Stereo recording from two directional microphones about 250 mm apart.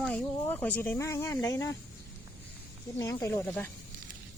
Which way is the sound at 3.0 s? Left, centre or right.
Centre.